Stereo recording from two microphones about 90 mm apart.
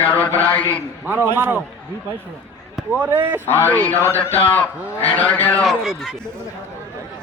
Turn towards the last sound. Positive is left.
turn(degrees=0)  # may be behind; listen again after turning